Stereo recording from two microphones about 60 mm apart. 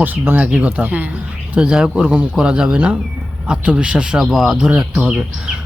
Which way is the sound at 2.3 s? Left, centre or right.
Centre.